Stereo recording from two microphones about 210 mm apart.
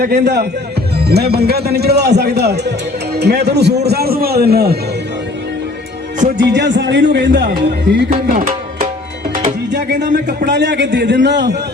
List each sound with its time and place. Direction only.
0.0 s a man's voice: 50° right (ahead or behind)
6.3 s a man's voice: 55° right (ahead or behind)
8.1 s tabla: 35° right (ahead or behind)
9.3 s music: 35° right (ahead or behind)
9.6 s a man's voice: 55° right (ahead or behind)